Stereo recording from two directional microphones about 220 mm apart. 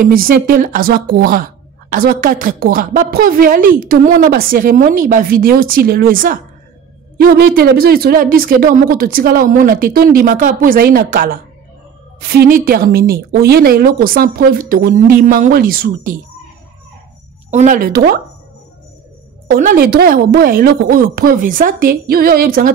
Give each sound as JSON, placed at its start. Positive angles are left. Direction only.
{"t": 0.0, "sound": "a woman's voice", "side_deg": -40}
{"t": 17.5, "sound": "a woman's voice", "side_deg": -35}
{"t": 19.5, "sound": "a woman's voice", "side_deg": -40}